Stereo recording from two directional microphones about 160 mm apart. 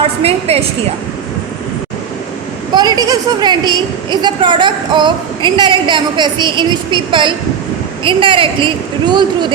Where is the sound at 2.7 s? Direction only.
25° right (ahead or behind).